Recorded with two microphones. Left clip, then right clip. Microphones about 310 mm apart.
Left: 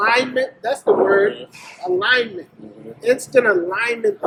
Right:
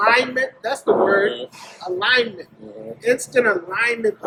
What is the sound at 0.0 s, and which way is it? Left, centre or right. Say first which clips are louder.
Speech: even; centre.